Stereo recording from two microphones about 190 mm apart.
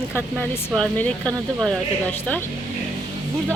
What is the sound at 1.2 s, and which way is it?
Speech, 15° right (ahead or behind).